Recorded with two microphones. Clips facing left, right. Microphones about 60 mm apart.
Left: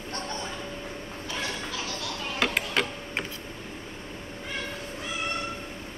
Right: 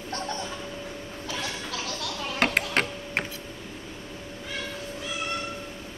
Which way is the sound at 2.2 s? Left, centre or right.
Right.